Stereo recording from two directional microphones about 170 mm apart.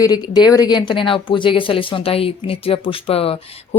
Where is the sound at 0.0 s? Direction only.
25° left (ahead or behind).